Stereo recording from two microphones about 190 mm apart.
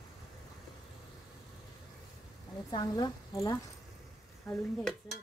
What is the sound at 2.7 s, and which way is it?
Speech, 20° left (ahead or behind).